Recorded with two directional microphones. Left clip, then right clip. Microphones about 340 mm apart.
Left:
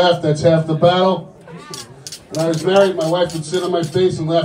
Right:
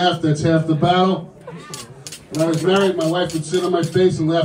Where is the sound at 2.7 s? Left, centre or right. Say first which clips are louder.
Left 5 dB; centre.